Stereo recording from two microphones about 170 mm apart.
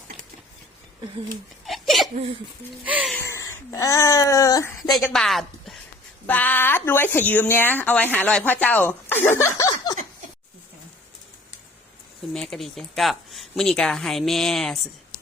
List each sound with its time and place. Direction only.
1.6 s hiccup: centre (ahead or behind)
2.8 s speech: 5° right (ahead or behind)
3.2 s speech: 15° left (ahead or behind)
5.1 s speech: centre (ahead or behind); by 10.0 s 25° left (ahead or behind)
12.3 s speech: centre (ahead or behind)